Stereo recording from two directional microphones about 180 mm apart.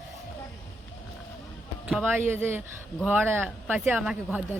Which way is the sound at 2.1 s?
10° right (ahead or behind).